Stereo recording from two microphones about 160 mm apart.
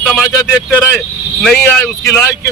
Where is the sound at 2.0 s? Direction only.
15° left (ahead or behind).